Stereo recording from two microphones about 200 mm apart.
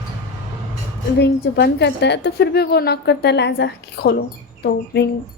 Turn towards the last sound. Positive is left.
turn(degrees=55)  # may be behind; listen again after turning